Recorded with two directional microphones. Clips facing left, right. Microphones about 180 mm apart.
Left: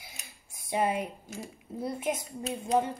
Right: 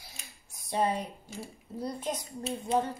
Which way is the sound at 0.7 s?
10° left (ahead or behind).